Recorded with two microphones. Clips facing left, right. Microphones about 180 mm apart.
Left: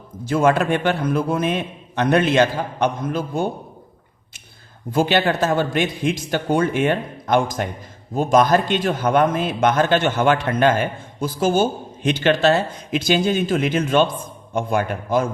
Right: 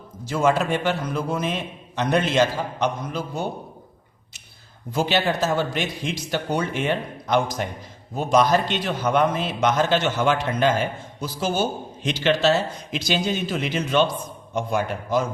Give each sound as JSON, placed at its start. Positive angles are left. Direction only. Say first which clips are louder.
{"t": 0.3, "sound": "a man's voice", "louder": "left 3 dB", "side_deg": 55}
{"t": 4.9, "sound": "a man's voice", "louder": "left 4 dB", "side_deg": 55}